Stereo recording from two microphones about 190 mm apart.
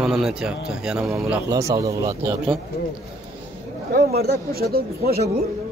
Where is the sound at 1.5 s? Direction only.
20° right (ahead or behind).